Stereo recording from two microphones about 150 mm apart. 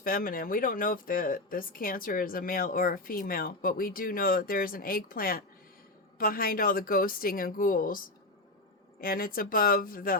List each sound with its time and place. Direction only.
0.0 s speech: 70° left (ahead or behind)